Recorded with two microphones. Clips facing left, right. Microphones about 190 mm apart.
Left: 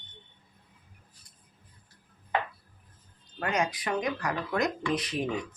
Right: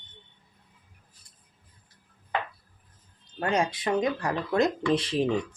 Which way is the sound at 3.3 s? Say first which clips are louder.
Right 3 dB; 30° right (ahead or behind).